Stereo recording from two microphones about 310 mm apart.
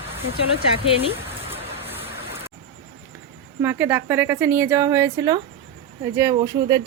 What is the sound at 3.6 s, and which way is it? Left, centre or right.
Speech, centre.